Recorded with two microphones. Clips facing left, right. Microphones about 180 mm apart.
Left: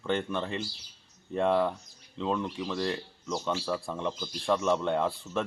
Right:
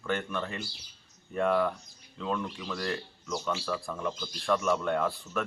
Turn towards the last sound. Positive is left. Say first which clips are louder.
# left 1 dB
turn(degrees=25)  # may be behind; listen again after turning